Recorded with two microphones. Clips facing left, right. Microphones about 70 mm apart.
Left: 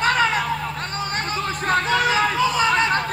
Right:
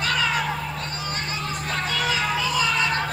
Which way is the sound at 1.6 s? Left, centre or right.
Left.